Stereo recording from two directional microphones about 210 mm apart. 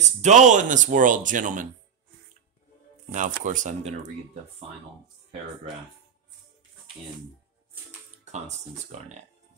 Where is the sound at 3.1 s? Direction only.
35° right (ahead or behind).